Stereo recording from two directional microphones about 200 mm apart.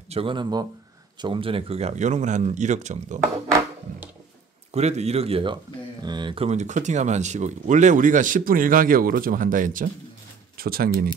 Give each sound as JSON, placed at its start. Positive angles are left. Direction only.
{"t": 0.1, "sound": "speech", "side_deg": -25}
{"t": 4.7, "sound": "speech", "side_deg": -35}